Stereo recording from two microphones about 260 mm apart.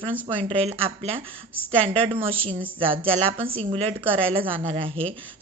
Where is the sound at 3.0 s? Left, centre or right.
Right.